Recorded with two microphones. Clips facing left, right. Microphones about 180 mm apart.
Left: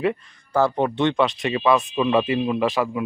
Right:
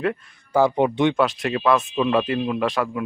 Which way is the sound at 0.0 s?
Centre (ahead or behind).